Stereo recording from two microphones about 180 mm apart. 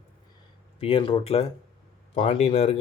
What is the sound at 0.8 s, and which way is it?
Speech, 30° left (ahead or behind).